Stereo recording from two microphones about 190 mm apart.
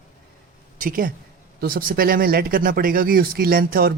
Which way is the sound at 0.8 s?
45° right (ahead or behind).